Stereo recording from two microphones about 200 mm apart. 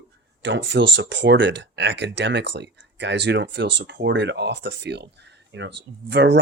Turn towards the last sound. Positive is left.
turn(degrees=-60)  # may be behind; listen again after turning